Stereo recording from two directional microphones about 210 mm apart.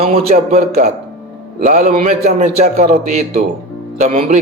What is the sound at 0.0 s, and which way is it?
Music, 30° right (ahead or behind).